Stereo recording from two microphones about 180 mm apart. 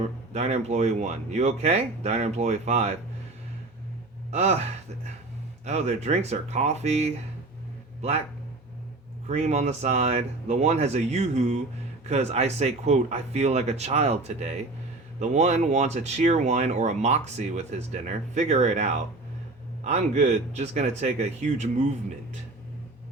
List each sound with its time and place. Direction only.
0.3 s speech: 40° right (ahead or behind)
4.3 s speech: 35° right (ahead or behind)
5.6 s speech: 40° right (ahead or behind)
9.2 s speech: 40° right (ahead or behind)